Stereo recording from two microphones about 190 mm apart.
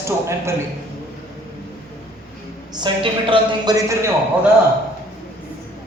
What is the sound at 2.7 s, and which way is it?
A woman's voice, 25° right (ahead or behind).